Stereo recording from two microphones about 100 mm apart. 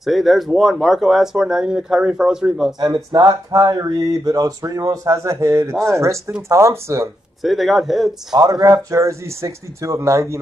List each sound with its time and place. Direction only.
0.0 s speech: centre (ahead or behind)
2.8 s speech: 40° right (ahead or behind)
7.4 s speech: centre (ahead or behind)
8.3 s speech: 40° right (ahead or behind)
8.9 s speech: 30° right (ahead or behind)